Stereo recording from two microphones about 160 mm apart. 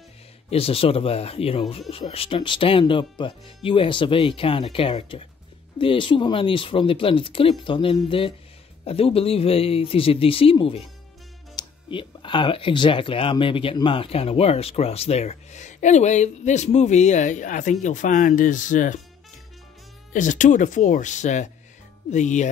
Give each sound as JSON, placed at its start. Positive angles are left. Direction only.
{"t": 0.5, "sound": "speech", "side_deg": 35}
{"t": 20.1, "sound": "speech", "side_deg": 50}